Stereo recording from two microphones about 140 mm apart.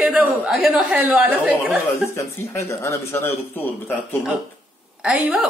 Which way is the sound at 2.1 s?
20° left (ahead or behind).